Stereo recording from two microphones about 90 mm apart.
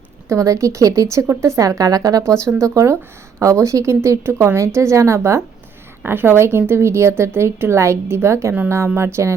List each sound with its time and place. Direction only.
0.3 s a woman's voice: 35° right (ahead or behind)